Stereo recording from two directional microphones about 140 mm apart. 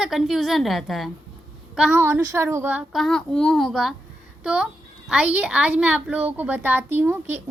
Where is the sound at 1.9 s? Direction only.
15° right (ahead or behind).